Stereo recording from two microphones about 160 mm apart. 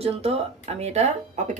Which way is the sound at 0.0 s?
40° right (ahead or behind).